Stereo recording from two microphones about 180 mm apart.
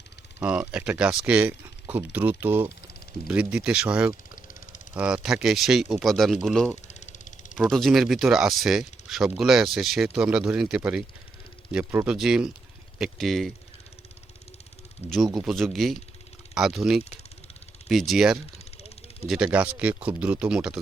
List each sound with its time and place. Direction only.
0.3 s speech: 10° right (ahead or behind)
6.8 s a sound: 40° left (ahead or behind)
7.5 s speech: centre (ahead or behind)
15.0 s speech: 35° left (ahead or behind)
15.4 s speech: centre (ahead or behind)
18.8 s a sound: 35° left (ahead or behind)
19.3 s speech: 5° right (ahead or behind)